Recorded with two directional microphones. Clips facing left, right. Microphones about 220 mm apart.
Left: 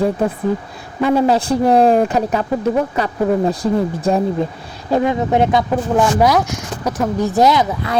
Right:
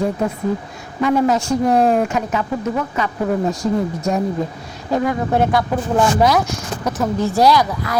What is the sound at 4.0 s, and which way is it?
Speech, 30° left (ahead or behind).